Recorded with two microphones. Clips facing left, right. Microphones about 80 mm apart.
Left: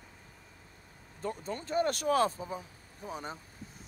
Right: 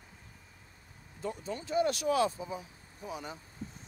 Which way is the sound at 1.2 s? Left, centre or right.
Left.